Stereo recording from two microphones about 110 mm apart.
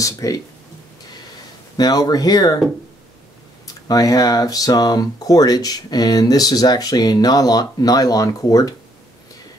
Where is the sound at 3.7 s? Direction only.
35° left (ahead or behind).